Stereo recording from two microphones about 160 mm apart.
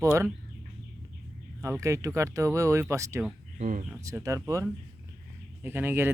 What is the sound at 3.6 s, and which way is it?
Speech, 50° right (ahead or behind).